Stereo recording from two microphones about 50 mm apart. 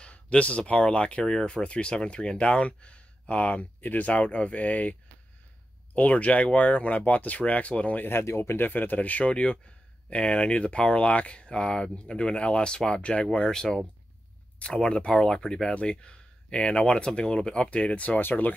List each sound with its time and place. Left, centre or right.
0.0 s speech: left
5.9 s speech: left
8.0 s speech: left
9.3 s speech: left
13.5 s speech: centre; by 18.5 s left